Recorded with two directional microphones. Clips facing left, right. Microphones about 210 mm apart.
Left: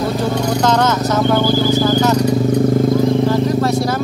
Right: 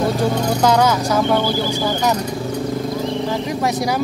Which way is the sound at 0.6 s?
10° right (ahead or behind).